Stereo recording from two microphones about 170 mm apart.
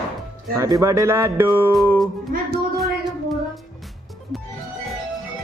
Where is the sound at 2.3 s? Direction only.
55° right (ahead or behind).